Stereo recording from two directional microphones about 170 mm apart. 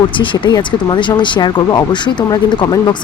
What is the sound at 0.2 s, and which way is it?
Speech, 25° left (ahead or behind).